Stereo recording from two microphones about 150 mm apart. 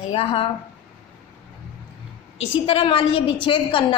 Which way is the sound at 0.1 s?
40° left (ahead or behind).